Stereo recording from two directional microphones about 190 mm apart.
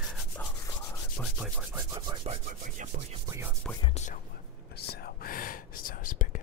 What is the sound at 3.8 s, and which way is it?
Whispering, 40° left (ahead or behind).